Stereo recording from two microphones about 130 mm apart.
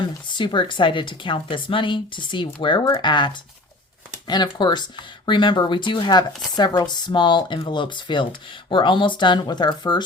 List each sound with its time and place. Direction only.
0.3 s speech: 40° left (ahead or behind)